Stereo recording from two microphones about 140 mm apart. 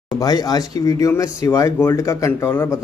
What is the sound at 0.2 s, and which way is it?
Speech, 25° left (ahead or behind).